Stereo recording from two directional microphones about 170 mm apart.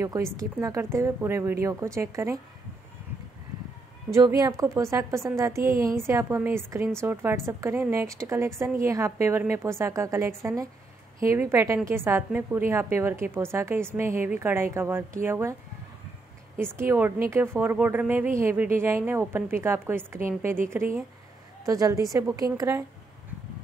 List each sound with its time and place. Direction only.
0.0 s a woman's voice: 20° right (ahead or behind)
4.4 s a woman's voice: 20° right (ahead or behind)
16.7 s a woman's voice: 15° right (ahead or behind)